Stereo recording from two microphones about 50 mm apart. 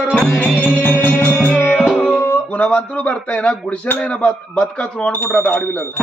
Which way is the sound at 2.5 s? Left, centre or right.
Left.